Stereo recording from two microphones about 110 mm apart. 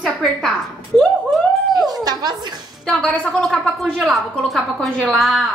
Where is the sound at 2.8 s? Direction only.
5° left (ahead or behind).